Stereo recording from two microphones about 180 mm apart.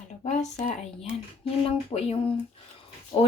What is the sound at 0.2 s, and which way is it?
Speech, 40° left (ahead or behind).